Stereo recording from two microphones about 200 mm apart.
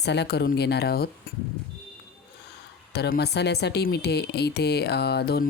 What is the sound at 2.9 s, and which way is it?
Speech, 55° left (ahead or behind).